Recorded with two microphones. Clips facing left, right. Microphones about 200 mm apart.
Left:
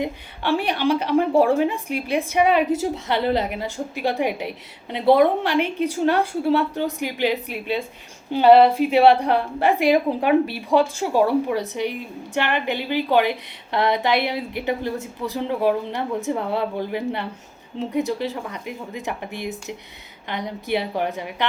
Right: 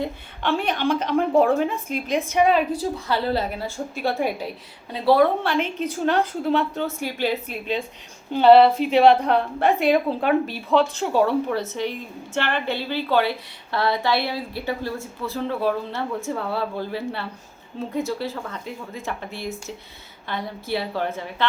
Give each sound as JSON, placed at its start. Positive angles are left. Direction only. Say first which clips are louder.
{"t": 0.0, "sound": "a woman's voice", "louder": "left 1 dB", "side_deg": 15}